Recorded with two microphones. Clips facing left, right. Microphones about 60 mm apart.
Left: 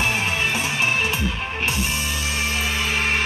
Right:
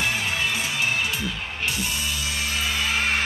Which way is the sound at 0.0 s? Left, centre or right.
Left.